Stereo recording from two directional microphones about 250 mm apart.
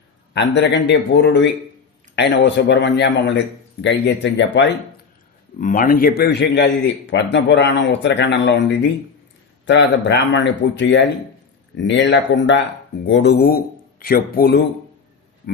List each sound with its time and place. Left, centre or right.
0.3 s a man's voice: left
5.5 s a man's voice: left